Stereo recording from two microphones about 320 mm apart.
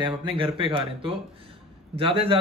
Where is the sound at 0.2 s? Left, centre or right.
Centre.